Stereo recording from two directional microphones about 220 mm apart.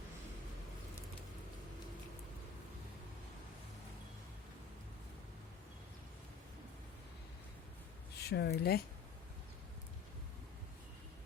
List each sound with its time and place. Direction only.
8.2 s speech: 50° left (ahead or behind)